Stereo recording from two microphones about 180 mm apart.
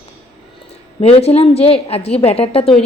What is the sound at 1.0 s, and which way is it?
A woman's voice, 35° left (ahead or behind).